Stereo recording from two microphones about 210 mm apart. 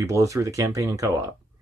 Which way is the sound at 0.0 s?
15° right (ahead or behind).